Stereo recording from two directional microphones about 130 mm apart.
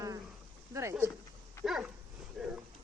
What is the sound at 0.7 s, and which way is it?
Speech, 20° right (ahead or behind).